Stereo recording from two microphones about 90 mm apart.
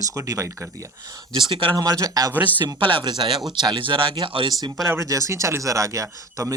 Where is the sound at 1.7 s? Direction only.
45° right (ahead or behind).